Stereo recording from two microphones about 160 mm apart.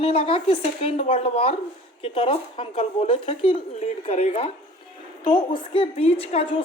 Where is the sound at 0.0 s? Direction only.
35° left (ahead or behind).